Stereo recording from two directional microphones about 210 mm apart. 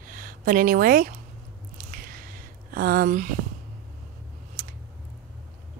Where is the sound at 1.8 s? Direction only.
45° right (ahead or behind).